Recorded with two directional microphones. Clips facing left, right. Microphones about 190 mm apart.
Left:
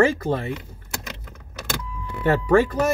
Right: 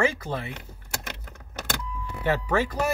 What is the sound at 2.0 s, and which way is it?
Speech, 55° left (ahead or behind).